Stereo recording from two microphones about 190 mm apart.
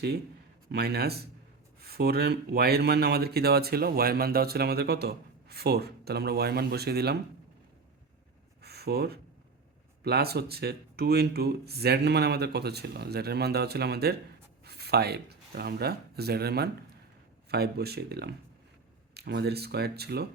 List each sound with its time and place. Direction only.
0.7 s speech: 55° right (ahead or behind)
8.6 s a sound: 55° right (ahead or behind)
10.0 s speech: 55° right (ahead or behind)